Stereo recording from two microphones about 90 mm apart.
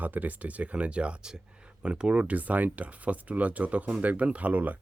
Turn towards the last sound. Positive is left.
turn(degrees=-15)  # may be behind; listen again after turning